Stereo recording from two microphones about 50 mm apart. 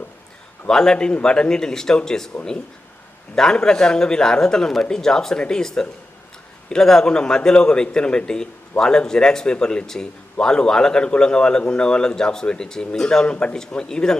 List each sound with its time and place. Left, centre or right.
0.7 s speech: centre
3.3 s speech: centre